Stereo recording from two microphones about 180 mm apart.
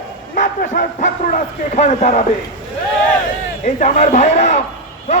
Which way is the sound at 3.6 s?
40° left (ahead or behind).